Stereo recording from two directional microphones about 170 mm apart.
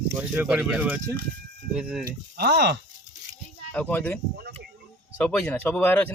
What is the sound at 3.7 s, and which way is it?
Speech, 10° left (ahead or behind).